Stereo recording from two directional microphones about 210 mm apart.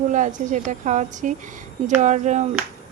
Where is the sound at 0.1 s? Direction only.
35° right (ahead or behind).